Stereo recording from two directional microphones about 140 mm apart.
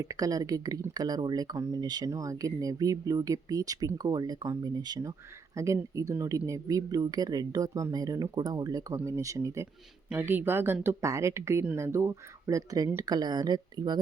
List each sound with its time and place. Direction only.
0.0 s speech: 25° right (ahead or behind)